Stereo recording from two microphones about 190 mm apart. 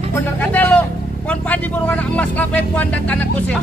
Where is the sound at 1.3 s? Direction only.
5° left (ahead or behind).